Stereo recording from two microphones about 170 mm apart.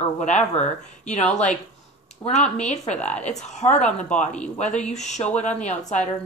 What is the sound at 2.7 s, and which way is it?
Speech, 40° left (ahead or behind).